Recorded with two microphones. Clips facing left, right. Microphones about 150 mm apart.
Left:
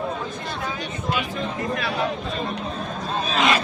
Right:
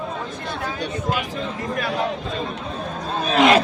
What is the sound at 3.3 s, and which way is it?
Speech, 55° right (ahead or behind).